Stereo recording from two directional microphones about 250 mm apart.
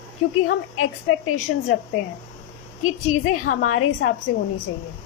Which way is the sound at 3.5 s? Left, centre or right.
Left.